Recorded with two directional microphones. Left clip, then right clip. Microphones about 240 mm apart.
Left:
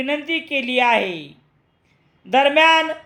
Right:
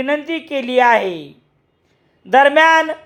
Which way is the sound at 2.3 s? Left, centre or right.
Centre.